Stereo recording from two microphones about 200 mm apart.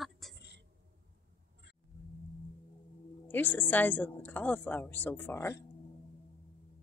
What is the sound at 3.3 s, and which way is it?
Speech, 10° left (ahead or behind).